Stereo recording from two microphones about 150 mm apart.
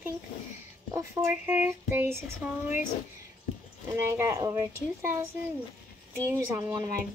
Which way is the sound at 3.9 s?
20° right (ahead or behind).